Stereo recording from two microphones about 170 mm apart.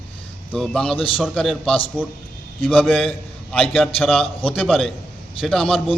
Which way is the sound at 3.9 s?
Centre (ahead or behind).